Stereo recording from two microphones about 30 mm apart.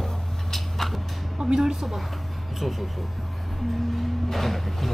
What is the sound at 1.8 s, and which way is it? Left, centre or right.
Speech, centre.